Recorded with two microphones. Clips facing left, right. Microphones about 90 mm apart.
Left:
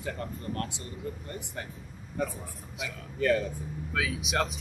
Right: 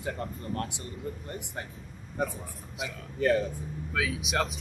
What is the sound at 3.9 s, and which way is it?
Speech, centre (ahead or behind).